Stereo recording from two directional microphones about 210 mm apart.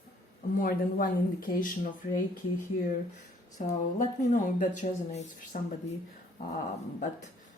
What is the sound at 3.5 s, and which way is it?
Speech, 35° left (ahead or behind).